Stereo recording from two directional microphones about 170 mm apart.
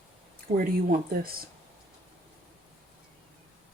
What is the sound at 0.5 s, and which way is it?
Speech, 55° right (ahead or behind).